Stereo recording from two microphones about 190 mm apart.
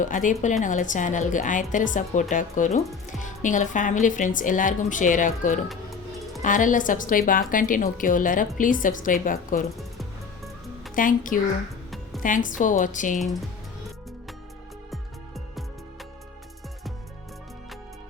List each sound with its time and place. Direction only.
0.0 s speech: 45° left (ahead or behind)
10.9 s speech: 45° left (ahead or behind)